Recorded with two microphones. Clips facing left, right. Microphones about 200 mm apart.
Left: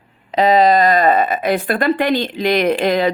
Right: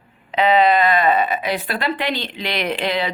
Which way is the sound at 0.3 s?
40° left (ahead or behind).